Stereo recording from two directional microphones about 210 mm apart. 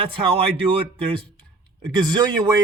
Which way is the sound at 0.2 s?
25° right (ahead or behind).